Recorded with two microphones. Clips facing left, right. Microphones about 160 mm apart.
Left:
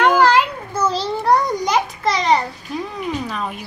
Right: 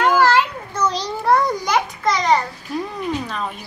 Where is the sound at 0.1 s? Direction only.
15° left (ahead or behind); by 1.7 s centre (ahead or behind).